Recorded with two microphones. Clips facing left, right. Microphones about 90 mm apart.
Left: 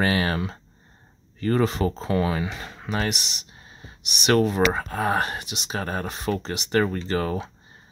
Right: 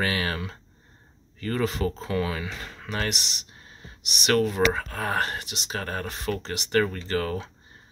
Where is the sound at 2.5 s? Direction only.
20° left (ahead or behind).